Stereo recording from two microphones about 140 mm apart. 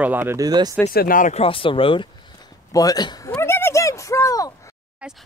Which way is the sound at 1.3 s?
40° left (ahead or behind).